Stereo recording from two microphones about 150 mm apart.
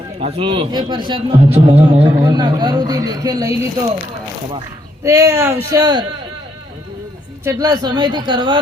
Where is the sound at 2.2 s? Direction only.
30° right (ahead or behind).